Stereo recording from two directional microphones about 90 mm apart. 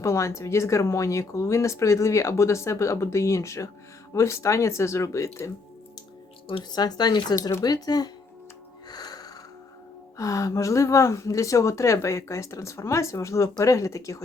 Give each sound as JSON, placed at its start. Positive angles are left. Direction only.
{"t": 0.0, "sound": "speech", "side_deg": 35}
{"t": 6.7, "sound": "speech", "side_deg": 50}
{"t": 8.9, "sound": "music", "side_deg": 50}
{"t": 10.2, "sound": "speech", "side_deg": 40}